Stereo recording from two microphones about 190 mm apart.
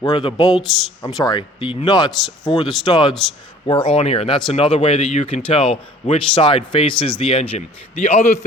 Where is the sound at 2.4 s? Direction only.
25° left (ahead or behind).